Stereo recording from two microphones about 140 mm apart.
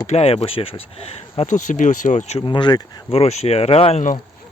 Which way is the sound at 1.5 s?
65° left (ahead or behind).